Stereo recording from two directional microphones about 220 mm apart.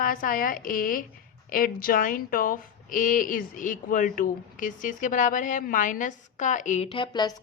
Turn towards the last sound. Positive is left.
turn(degrees=20)  # may be behind; listen again after turning